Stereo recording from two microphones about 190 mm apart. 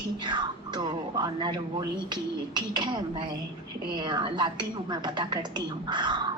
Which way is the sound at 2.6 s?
25° right (ahead or behind).